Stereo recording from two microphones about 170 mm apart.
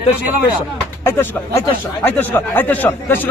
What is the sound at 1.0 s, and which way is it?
Speech, 15° left (ahead or behind).